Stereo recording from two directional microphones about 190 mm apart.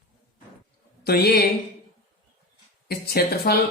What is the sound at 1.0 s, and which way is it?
Speech, 55° left (ahead or behind).